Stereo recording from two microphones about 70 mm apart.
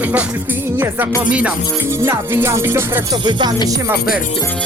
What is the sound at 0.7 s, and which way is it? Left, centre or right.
Music, right.